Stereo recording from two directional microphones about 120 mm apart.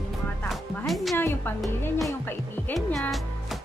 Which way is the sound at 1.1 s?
20° left (ahead or behind).